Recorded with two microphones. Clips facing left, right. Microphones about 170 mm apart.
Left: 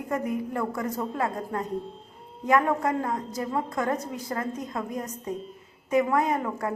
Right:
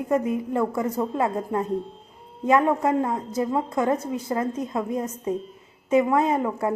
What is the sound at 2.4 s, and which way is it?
A woman's voice, 25° right (ahead or behind).